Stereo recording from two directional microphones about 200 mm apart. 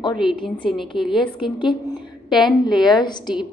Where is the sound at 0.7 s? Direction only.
Centre (ahead or behind).